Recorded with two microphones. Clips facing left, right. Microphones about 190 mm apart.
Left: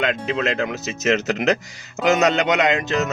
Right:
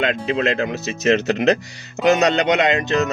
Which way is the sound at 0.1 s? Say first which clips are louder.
Right 2 dB; 35° right (ahead or behind).